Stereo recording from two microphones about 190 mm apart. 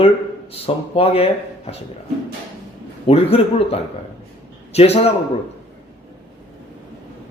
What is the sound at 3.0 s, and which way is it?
Speech, 30° left (ahead or behind).